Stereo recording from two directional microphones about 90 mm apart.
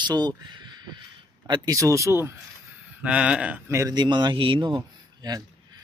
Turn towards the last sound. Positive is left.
turn(degrees=-60)  # may be behind; listen again after turning